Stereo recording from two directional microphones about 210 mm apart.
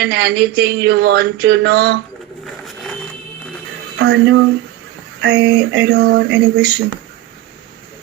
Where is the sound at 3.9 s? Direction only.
50° right (ahead or behind).